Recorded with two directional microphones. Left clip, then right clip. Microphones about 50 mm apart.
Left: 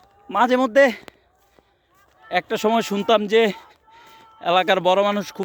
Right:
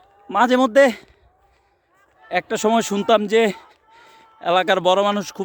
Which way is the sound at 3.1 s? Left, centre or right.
Right.